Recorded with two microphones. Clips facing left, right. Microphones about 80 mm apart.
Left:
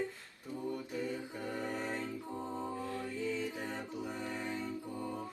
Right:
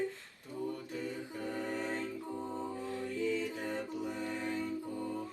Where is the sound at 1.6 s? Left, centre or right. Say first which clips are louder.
Right 1 dB; centre.